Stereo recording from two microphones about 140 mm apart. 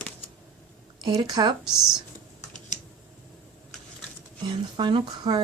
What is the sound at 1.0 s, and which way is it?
Speech, 30° right (ahead or behind).